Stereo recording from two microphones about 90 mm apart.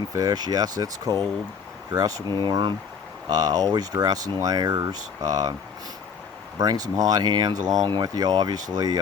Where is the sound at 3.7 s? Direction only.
45° right (ahead or behind).